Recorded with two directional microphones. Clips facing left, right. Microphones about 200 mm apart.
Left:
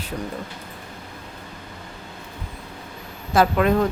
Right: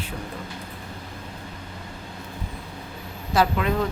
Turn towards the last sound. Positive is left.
turn(degrees=50)  # may be behind; listen again after turning